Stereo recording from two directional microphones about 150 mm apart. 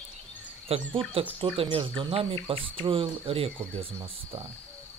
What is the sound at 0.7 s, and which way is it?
Speech, 40° right (ahead or behind).